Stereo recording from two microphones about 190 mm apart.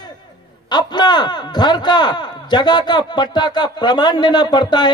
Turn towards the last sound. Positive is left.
turn(degrees=20)  # may be behind; listen again after turning